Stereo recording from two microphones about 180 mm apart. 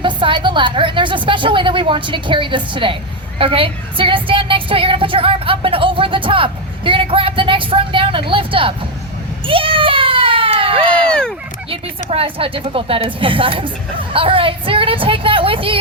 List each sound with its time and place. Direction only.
0.0 s a woman's voice: 25° right (ahead or behind)
9.5 s a sound: 30° right (ahead or behind)
11.1 s speech: 5° left (ahead or behind)
12.0 s a woman's voice: 30° right (ahead or behind)